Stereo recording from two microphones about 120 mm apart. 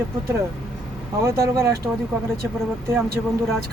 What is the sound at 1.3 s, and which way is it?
Speech, 25° right (ahead or behind).